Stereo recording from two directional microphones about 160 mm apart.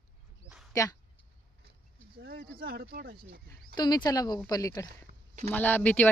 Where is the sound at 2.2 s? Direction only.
70° right (ahead or behind).